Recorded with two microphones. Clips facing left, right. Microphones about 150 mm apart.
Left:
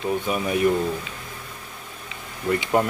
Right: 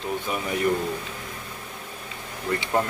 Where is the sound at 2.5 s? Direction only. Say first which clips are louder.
Left 3 dB; 20° left (ahead or behind).